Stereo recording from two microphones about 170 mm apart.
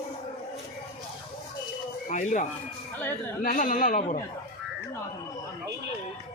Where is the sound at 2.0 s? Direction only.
45° left (ahead or behind).